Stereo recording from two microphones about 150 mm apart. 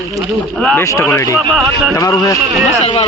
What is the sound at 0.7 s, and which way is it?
Speech, 20° left (ahead or behind).